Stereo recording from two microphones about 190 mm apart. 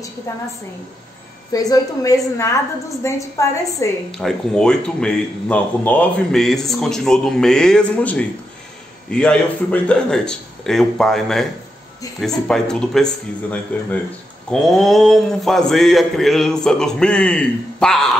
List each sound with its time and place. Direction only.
1.5 s a woman's voice: 20° left (ahead or behind)
4.1 s speech: centre (ahead or behind)